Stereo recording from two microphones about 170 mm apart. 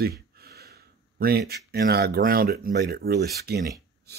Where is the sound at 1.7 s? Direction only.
65° right (ahead or behind).